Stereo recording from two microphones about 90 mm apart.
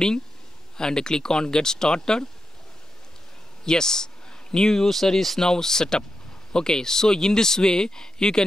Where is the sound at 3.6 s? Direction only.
5° left (ahead or behind).